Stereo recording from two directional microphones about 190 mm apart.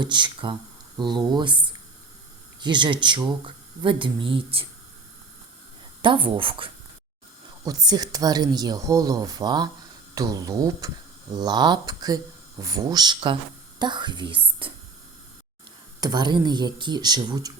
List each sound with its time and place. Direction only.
0.0 s speech: 25° right (ahead or behind)
6.0 s speech: 25° right (ahead or behind)
16.0 s speech: 20° right (ahead or behind)